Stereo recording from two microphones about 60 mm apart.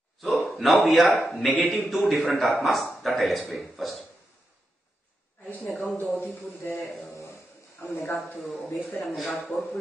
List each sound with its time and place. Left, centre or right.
0.2 s a man's voice: centre
5.6 s a sound: centre
7.8 s a man's voice: centre